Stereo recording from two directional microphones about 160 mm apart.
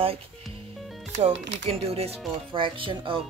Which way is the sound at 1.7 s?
40° right (ahead or behind).